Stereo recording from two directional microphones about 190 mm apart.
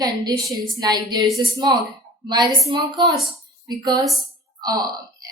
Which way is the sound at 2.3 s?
25° right (ahead or behind).